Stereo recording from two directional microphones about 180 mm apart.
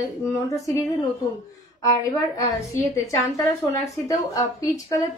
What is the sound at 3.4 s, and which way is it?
A woman's voice, 15° left (ahead or behind).